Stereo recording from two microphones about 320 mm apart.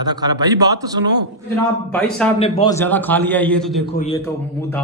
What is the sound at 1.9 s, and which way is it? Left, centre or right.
Speech, centre.